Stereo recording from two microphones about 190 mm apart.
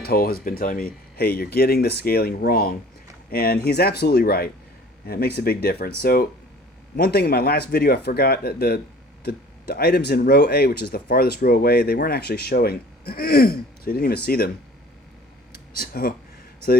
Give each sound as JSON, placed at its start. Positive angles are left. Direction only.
{"t": 0.0, "sound": "speech", "side_deg": 55}
{"t": 15.8, "sound": "speech", "side_deg": 50}